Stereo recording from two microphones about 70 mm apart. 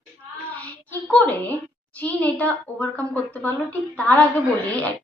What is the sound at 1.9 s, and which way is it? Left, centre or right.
A woman's voice, left.